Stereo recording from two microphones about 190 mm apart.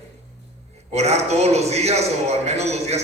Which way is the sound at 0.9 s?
35° right (ahead or behind).